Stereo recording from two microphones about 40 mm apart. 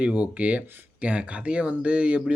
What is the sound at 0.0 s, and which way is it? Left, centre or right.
Speech, right.